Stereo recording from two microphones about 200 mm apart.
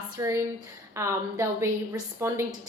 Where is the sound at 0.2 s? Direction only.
15° right (ahead or behind).